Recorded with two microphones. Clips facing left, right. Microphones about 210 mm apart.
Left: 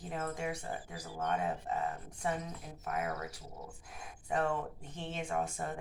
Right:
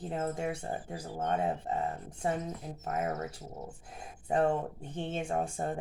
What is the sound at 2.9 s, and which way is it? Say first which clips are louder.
Speech: right 4 dB; 40° right (ahead or behind).